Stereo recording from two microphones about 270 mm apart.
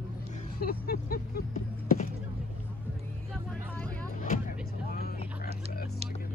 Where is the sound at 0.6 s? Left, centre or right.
Left.